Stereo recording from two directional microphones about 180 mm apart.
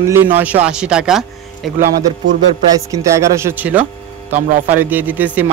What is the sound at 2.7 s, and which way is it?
A man's voice, 20° right (ahead or behind).